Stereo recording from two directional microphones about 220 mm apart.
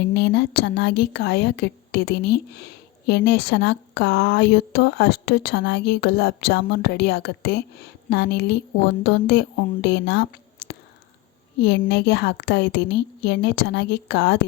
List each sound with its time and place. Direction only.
0.1 s a woman's voice: 50° left (ahead or behind)
11.6 s a woman's voice: 50° left (ahead or behind)